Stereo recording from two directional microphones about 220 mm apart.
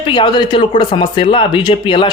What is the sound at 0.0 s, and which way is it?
Speech, 20° left (ahead or behind).